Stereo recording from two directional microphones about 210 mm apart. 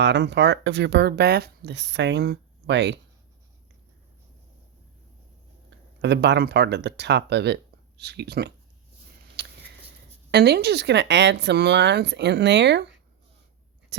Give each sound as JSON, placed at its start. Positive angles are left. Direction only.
{"t": 0.0, "sound": "speech", "side_deg": -55}
{"t": 6.0, "sound": "speech", "side_deg": -55}
{"t": 9.3, "sound": "a sound", "side_deg": -50}
{"t": 10.3, "sound": "speech", "side_deg": -50}